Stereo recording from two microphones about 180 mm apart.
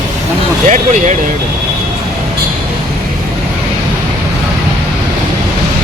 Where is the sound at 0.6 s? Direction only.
40° right (ahead or behind).